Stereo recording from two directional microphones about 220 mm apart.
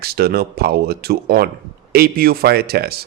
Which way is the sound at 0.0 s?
45° right (ahead or behind).